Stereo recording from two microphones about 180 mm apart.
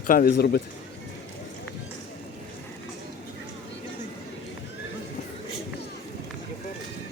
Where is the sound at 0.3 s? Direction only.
65° left (ahead or behind).